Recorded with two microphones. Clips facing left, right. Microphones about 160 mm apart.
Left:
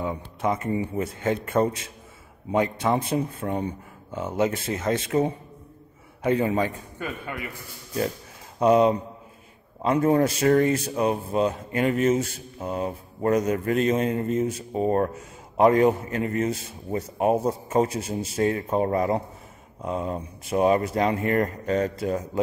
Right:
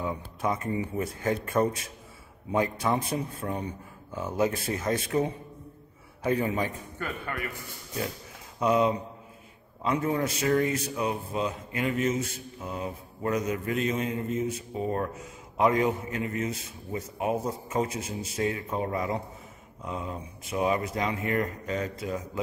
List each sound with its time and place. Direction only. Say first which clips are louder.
0.0 s a sound: left 3 dB; 25° left (ahead or behind)
0.9 s a man's voice: left 3 dB; 25° left (ahead or behind)
7.0 s speech: left 2 dB; 15° left (ahead or behind)
8.5 s a man's voice: left 6 dB; 35° left (ahead or behind)
9.8 s a man's voice: left 7 dB; 50° left (ahead or behind)